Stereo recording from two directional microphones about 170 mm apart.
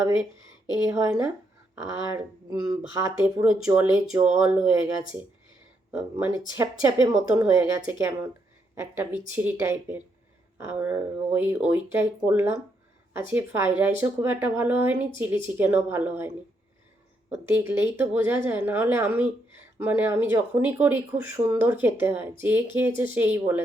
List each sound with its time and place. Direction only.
0.9 s speech: 10° right (ahead or behind)
3.2 s speech: 5° right (ahead or behind)
5.9 s speech: 10° right (ahead or behind)